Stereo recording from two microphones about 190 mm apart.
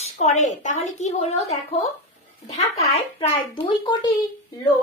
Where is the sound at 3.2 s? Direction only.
30° left (ahead or behind).